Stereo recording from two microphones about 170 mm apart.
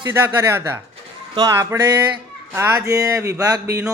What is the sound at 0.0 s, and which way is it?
Speech, 15° right (ahead or behind).